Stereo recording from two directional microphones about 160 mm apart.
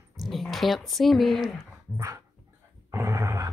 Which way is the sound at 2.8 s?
20° right (ahead or behind).